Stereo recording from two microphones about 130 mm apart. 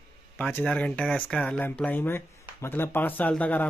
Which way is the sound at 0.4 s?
10° left (ahead or behind).